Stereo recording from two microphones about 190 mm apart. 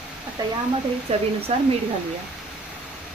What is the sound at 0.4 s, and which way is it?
Speech, 20° right (ahead or behind).